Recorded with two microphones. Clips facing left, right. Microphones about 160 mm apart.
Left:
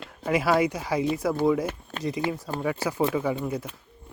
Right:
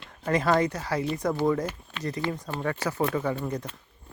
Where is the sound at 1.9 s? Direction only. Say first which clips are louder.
Left 4 dB; 45° left (ahead or behind).